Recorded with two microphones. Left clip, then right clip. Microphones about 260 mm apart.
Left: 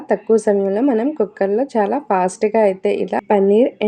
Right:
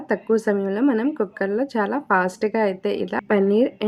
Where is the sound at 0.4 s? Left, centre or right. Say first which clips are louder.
Left 5 dB; centre.